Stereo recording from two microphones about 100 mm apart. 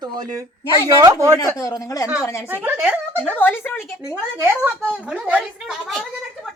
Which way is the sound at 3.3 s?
20° left (ahead or behind).